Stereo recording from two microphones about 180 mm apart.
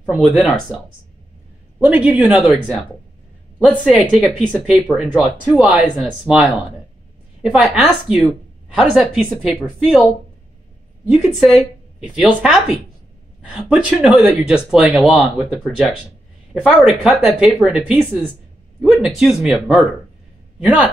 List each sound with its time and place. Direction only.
0.0 s speech: centre (ahead or behind)
4.1 s speech: 5° right (ahead or behind)
11.1 s a man's voice: centre (ahead or behind)